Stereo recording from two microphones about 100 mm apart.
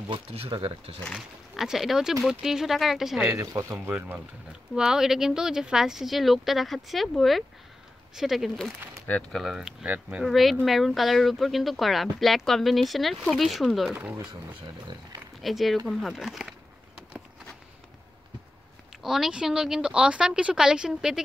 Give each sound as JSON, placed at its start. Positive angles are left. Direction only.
{"t": 0.1, "sound": "speech", "side_deg": -80}
{"t": 0.5, "sound": "speech", "side_deg": -60}
{"t": 1.1, "sound": "speech", "side_deg": -5}
{"t": 3.2, "sound": "speech", "side_deg": -25}
{"t": 9.8, "sound": "a woman's voice", "side_deg": -15}
{"t": 10.2, "sound": "speech", "side_deg": 0}
{"t": 15.4, "sound": "speech", "side_deg": 0}
{"t": 19.0, "sound": "a woman's voice", "side_deg": -5}